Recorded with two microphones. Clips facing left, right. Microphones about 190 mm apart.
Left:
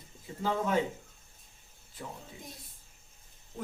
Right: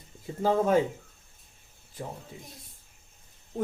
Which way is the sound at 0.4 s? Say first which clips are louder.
Right 7 dB; 40° right (ahead or behind).